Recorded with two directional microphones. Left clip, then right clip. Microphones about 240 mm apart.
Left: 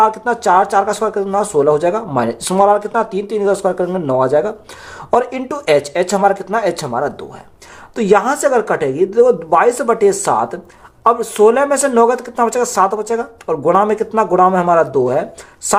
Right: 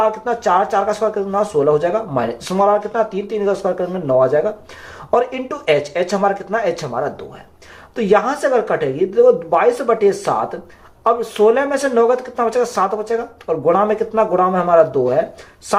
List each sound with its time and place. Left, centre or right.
0.0 s speech: left